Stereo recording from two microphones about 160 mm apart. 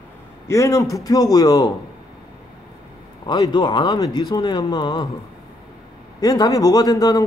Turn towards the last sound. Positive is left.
turn(degrees=20)  # may be behind; listen again after turning